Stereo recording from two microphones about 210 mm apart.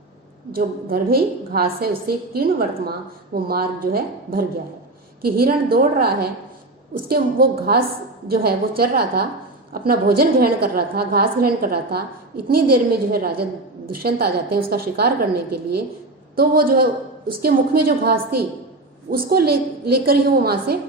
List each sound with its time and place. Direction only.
0.5 s a woman's voice: 45° right (ahead or behind)